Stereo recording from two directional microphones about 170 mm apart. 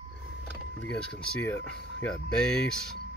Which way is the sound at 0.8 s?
10° left (ahead or behind).